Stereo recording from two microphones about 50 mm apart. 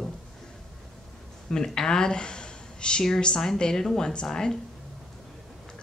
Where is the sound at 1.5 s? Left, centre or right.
Centre.